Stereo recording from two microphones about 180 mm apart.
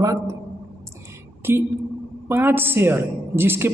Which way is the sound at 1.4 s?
10° right (ahead or behind).